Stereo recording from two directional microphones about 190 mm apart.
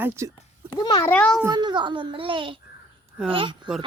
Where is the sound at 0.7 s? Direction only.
20° left (ahead or behind).